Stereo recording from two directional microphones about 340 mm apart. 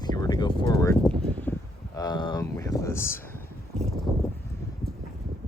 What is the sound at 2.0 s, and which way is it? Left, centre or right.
Speech, centre.